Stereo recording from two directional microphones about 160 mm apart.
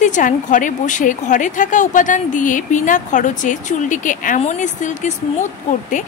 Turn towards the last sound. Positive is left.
turn(degrees=50)  # may be behind; listen again after turning